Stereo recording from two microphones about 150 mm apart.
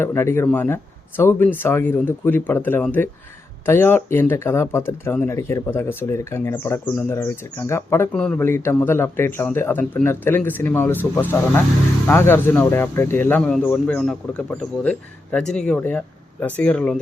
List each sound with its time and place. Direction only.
0.0 s speech: 15° left (ahead or behind)
8.1 s speech: 5° left (ahead or behind)